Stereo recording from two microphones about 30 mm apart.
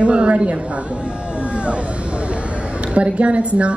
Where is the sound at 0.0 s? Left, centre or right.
Right.